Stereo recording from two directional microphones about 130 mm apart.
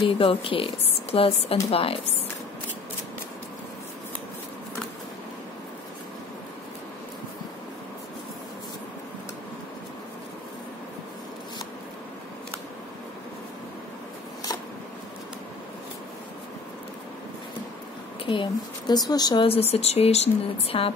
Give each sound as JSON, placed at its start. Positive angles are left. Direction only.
{"t": 0.2, "sound": "speech", "side_deg": 45}
{"t": 18.2, "sound": "speech", "side_deg": 40}
{"t": 19.4, "sound": "speech", "side_deg": 50}